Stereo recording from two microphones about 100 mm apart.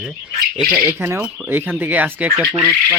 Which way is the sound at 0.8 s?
25° right (ahead or behind).